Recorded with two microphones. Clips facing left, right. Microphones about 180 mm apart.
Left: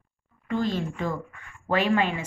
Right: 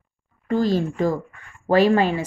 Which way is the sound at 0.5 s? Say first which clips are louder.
Right 6 dB; 35° right (ahead or behind).